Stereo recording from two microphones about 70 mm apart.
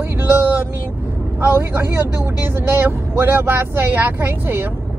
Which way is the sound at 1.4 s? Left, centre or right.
Right.